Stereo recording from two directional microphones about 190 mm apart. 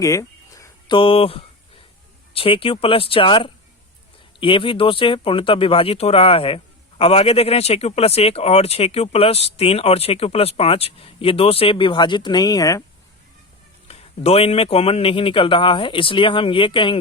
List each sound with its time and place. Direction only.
0.0 s a sound: 15° left (ahead or behind)
2.3 s speech: 30° left (ahead or behind)
13.8 s speech: 30° left (ahead or behind)